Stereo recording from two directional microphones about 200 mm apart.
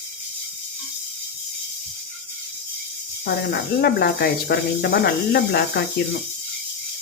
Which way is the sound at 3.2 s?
55° left (ahead or behind).